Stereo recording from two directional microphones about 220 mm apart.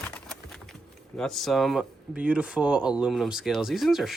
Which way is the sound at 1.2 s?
Centre (ahead or behind).